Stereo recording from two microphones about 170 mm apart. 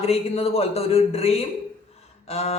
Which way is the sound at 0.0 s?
35° left (ahead or behind).